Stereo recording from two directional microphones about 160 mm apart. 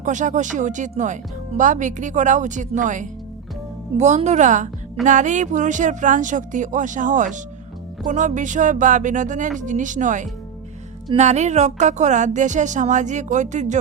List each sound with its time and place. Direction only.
0.0 s speech: 50° right (ahead or behind)